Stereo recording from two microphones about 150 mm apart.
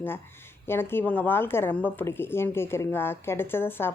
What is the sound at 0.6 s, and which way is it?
A woman's voice, 15° left (ahead or behind).